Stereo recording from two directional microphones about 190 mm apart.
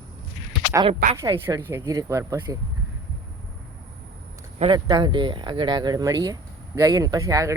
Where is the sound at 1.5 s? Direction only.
15° right (ahead or behind).